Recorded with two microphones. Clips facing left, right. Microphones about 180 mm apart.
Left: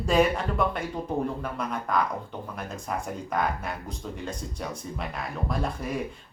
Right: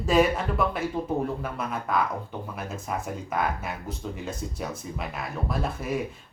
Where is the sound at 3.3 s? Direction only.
5° right (ahead or behind).